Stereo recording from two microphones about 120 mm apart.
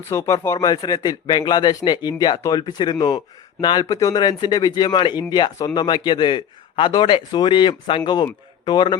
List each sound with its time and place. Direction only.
0.1 s a man's voice: 25° left (ahead or behind)